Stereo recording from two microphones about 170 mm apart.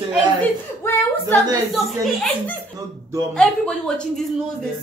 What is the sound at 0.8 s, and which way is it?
Speech, 10° left (ahead or behind).